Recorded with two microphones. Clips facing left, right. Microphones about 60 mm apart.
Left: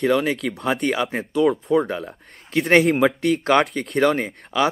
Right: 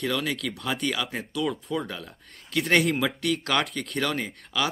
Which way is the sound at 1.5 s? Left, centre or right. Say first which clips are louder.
Left 10 dB; left.